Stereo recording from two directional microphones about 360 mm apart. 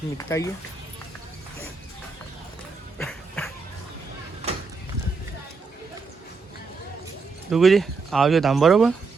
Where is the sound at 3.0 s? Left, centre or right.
Centre.